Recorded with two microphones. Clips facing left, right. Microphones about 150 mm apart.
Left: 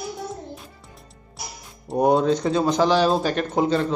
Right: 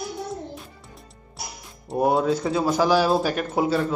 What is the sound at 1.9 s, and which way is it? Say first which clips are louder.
Speech: left 2 dB; 5° right (ahead or behind).